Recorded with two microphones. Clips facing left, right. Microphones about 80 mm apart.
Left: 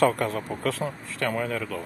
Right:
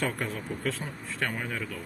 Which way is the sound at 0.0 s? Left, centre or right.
Left.